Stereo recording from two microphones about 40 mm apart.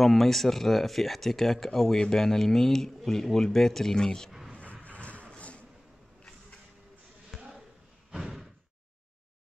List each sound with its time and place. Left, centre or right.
0.0 s speech: centre
4.8 s a sound: left
7.3 s basketball bounce: centre
8.1 s slam: right